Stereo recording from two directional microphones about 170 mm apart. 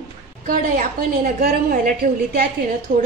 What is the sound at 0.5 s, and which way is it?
Speech, 55° right (ahead or behind).